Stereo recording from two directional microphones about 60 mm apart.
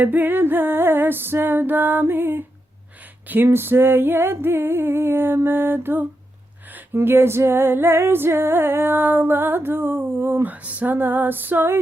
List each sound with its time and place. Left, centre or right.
0.0 s female singing: right
10.5 s female singing: right